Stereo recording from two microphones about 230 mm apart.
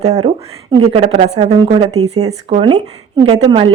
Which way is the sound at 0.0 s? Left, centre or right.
Right.